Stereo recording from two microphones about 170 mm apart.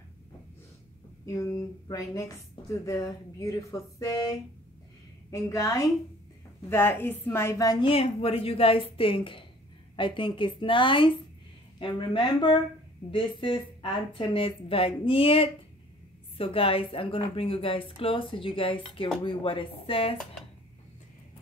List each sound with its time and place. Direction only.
1.2 s a woman's voice: 20° left (ahead or behind)
7.9 s speech: 35° left (ahead or behind)